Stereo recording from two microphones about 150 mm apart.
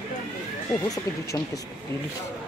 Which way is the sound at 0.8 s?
25° left (ahead or behind).